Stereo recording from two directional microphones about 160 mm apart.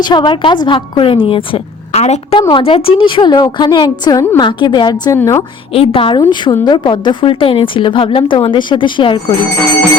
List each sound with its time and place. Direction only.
0.0 s a woman's voice: 30° left (ahead or behind)
5.7 s a woman's voice: 35° left (ahead or behind)